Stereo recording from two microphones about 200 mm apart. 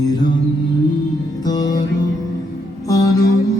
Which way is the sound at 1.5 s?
20° left (ahead or behind).